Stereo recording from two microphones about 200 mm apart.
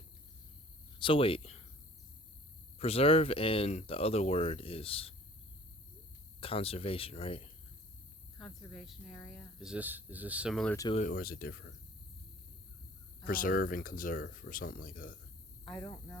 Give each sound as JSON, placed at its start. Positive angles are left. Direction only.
{"t": 0.9, "sound": "speech", "side_deg": 25}
{"t": 2.7, "sound": "speech", "side_deg": 30}
{"t": 6.4, "sound": "speech", "side_deg": 30}
{"t": 8.7, "sound": "speech", "side_deg": 0}
{"t": 10.9, "sound": "speech", "side_deg": 45}
{"t": 13.2, "sound": "speech", "side_deg": 45}
{"t": 15.8, "sound": "speech", "side_deg": 15}